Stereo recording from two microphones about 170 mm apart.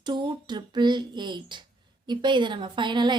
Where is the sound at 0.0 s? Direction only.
25° right (ahead or behind).